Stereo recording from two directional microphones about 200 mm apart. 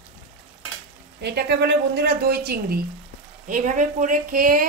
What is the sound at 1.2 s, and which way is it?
Speech, 55° right (ahead or behind).